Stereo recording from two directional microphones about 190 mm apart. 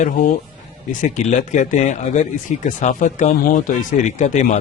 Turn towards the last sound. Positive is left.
turn(degrees=40)  # may be behind; listen again after turning